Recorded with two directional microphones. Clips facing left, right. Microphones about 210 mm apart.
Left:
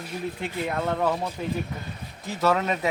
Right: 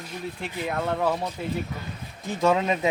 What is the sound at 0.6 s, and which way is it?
Speech, 10° right (ahead or behind).